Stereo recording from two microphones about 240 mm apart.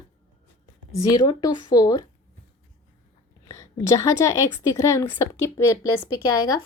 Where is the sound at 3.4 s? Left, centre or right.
Centre.